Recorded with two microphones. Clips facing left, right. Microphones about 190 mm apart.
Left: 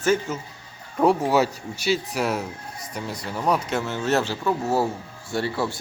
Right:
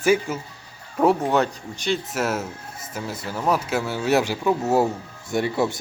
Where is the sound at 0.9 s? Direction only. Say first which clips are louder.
Even; centre (ahead or behind).